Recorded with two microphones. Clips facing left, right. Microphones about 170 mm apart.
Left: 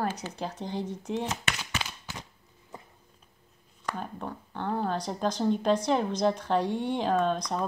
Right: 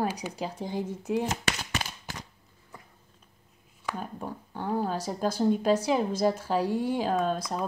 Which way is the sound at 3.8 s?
5° right (ahead or behind).